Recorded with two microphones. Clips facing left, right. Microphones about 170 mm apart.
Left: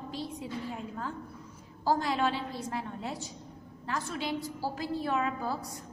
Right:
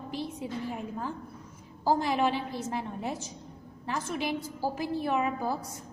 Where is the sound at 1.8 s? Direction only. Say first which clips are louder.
Right 2 dB; 15° right (ahead or behind).